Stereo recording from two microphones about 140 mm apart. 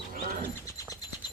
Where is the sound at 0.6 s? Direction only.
25° left (ahead or behind).